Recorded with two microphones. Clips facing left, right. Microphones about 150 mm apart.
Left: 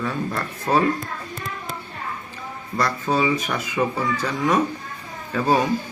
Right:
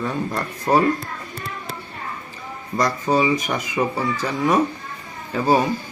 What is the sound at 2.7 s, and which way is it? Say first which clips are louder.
Speech: right 3 dB; 15° right (ahead or behind).